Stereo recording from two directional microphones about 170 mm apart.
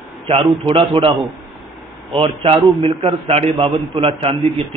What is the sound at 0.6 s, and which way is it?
Speech, 30° right (ahead or behind).